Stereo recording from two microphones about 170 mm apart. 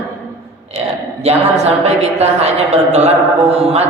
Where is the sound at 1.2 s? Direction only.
40° right (ahead or behind).